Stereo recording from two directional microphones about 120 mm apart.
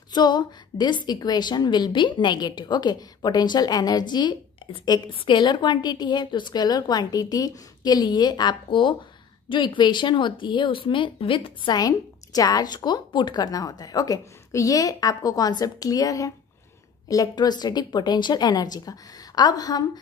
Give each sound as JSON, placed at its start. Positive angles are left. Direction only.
{"t": 0.1, "sound": "speech", "side_deg": 35}